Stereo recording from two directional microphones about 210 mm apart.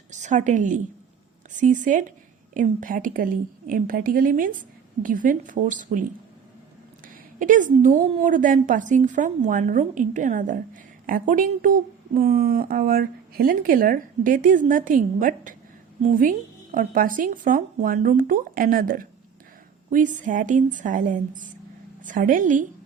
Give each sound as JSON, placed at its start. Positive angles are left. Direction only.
{"t": 0.1, "sound": "speech", "side_deg": -35}